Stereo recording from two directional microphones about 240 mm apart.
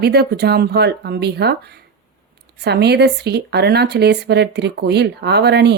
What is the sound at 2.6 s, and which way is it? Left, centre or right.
A woman's voice, right.